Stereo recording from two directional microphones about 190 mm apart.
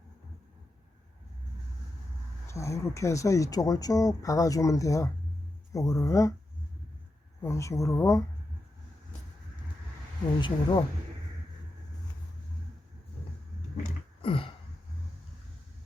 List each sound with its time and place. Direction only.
2.5 s speech: 15° left (ahead or behind)
7.4 s speech: 15° left (ahead or behind)
10.4 s speech: 25° left (ahead or behind)
14.2 s a sound: 30° left (ahead or behind)